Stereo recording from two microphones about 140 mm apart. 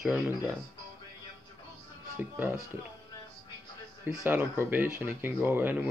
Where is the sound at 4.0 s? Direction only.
15° right (ahead or behind).